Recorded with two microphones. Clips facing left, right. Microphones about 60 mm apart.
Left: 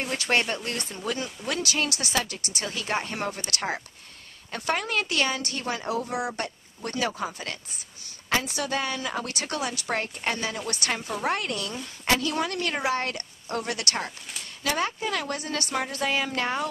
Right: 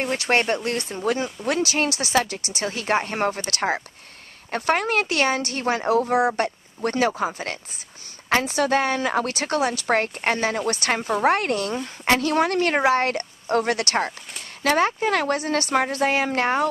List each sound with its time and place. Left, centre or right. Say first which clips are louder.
0.0 s speech: right 4 dB; right
15.3 s speech: right 8 dB; right